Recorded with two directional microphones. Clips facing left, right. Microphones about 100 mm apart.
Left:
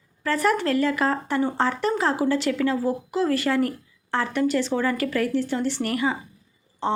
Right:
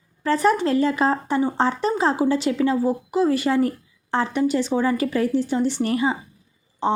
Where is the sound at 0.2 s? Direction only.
20° right (ahead or behind).